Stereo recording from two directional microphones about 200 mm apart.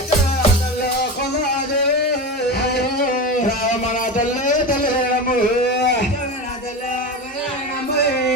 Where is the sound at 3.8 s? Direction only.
40° left (ahead or behind).